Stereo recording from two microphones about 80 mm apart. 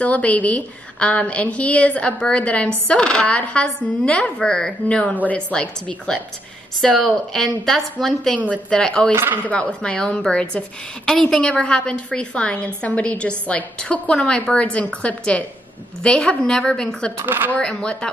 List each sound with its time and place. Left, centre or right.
0.0 s a woman's voice: centre
9.1 s speech: right
9.5 s a woman's voice: centre
17.2 s speech: right
17.5 s a woman's voice: centre